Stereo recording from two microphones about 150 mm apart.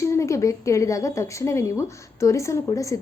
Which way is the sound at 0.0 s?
20° left (ahead or behind).